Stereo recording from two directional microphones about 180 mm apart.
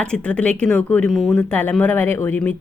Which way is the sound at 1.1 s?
Centre (ahead or behind).